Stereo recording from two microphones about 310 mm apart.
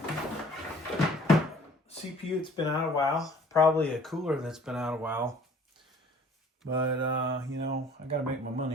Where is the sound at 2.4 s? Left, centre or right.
Centre.